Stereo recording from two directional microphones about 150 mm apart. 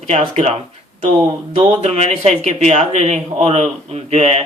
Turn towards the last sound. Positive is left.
turn(degrees=-45)  # may be behind; listen again after turning